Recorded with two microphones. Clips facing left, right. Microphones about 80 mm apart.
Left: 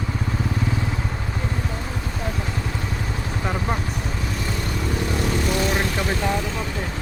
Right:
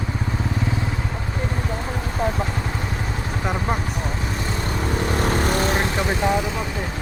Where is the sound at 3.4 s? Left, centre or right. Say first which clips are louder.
Right 1 dB; centre.